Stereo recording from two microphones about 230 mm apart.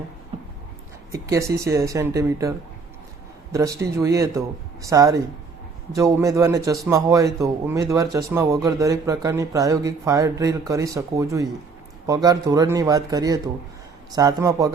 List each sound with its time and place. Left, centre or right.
1.1 s speech: centre